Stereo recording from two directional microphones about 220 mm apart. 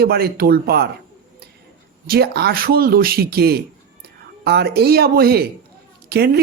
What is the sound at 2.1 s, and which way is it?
Speech, 45° right (ahead or behind).